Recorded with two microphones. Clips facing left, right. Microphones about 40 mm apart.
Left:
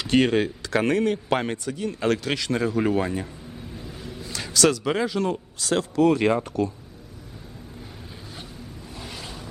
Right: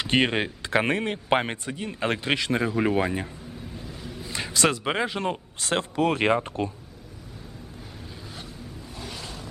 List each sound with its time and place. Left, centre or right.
0.0 s speech: right
3.8 s vehicle: centre
4.3 s speech: right
9.0 s a sound: centre